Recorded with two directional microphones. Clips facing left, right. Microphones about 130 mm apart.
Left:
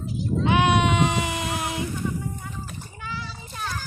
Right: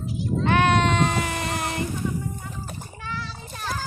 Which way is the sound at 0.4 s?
15° left (ahead or behind).